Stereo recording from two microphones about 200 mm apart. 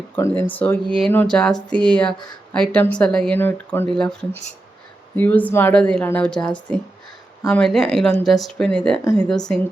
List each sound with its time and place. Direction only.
0.2 s a woman's voice: 10° left (ahead or behind)